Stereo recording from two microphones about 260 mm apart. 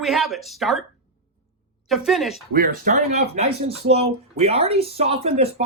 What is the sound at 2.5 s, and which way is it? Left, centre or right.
Speech, right.